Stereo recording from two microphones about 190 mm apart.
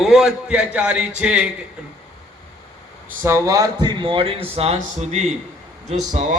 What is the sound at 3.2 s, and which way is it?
Speech, 15° right (ahead or behind).